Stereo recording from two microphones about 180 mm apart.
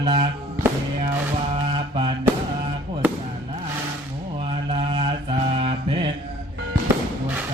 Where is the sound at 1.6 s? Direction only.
30° right (ahead or behind).